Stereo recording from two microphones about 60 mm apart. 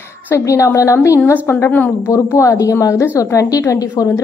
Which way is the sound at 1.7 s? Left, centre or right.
Left.